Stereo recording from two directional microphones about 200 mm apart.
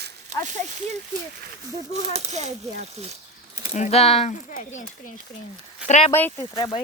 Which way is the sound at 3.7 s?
35° left (ahead or behind).